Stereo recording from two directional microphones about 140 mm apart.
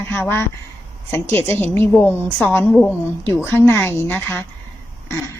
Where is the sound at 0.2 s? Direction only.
15° left (ahead or behind).